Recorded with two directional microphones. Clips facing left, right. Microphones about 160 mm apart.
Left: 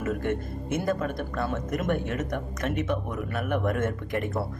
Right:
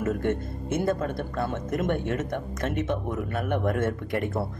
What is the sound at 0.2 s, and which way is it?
Speech, 25° right (ahead or behind).